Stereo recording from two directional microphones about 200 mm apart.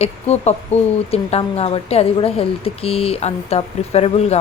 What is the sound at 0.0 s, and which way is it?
A woman's voice, 30° left (ahead or behind).